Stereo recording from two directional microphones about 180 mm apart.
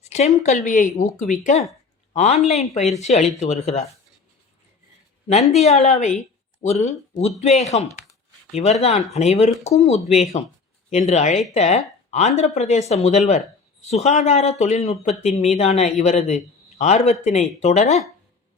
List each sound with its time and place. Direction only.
0.0 s a sound: 40° left (ahead or behind)
0.4 s speech: 40° left (ahead or behind)
5.3 s speech: 40° left (ahead or behind)